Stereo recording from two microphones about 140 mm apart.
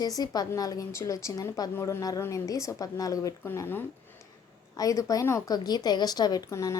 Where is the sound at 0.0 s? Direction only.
30° left (ahead or behind).